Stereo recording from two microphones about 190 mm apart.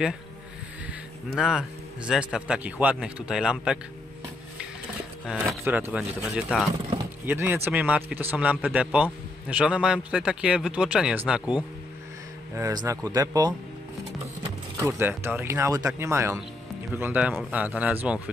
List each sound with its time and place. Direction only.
1.3 s speech: 5° right (ahead or behind)
5.2 s speech: centre (ahead or behind)
5.6 s speech: 10° right (ahead or behind)
12.5 s speech: 15° right (ahead or behind)
14.8 s speech: 15° right (ahead or behind)